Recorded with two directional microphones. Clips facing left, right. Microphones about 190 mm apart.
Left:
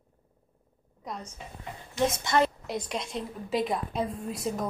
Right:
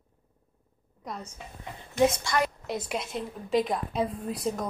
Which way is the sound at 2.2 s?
25° left (ahead or behind).